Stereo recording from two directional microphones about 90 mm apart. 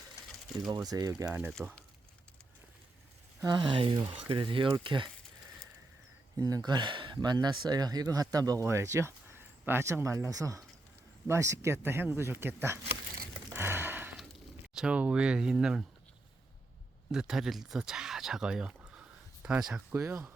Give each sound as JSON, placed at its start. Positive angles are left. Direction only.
{"t": 0.9, "sound": "speech", "side_deg": -45}
{"t": 1.3, "sound": "speech", "side_deg": -20}
{"t": 3.4, "sound": "speech", "side_deg": -50}
{"t": 3.7, "sound": "speech", "side_deg": -70}
{"t": 6.3, "sound": "speech", "side_deg": -40}
{"t": 13.5, "sound": "a sound", "side_deg": -25}
{"t": 14.2, "sound": "a sound", "side_deg": -10}
{"t": 17.1, "sound": "speech", "side_deg": -5}
{"t": 19.9, "sound": "speech", "side_deg": -30}